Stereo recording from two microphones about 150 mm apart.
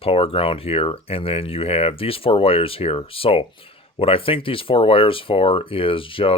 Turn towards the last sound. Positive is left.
turn(degrees=35)  # may be behind; listen again after turning